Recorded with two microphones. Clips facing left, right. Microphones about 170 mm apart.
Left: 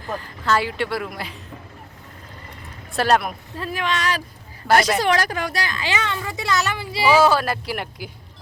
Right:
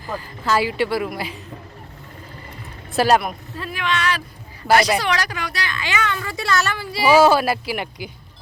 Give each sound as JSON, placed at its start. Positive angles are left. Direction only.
{"t": 0.1, "sound": "speech", "side_deg": -5}
{"t": 2.9, "sound": "speech", "side_deg": -5}
{"t": 3.6, "sound": "a woman's voice", "side_deg": 40}
{"t": 7.1, "sound": "speech", "side_deg": -10}